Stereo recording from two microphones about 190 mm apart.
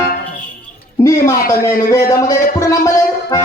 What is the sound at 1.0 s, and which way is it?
A woman's voice, 15° left (ahead or behind).